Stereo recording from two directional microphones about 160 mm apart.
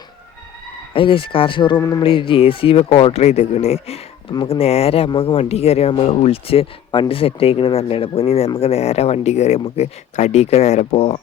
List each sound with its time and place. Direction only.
0.9 s speech: 35° left (ahead or behind)
1.8 s a sound: 20° left (ahead or behind)
2.0 s speech: 35° left (ahead or behind)